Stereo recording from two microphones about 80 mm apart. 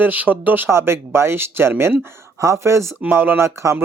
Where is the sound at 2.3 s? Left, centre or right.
Right.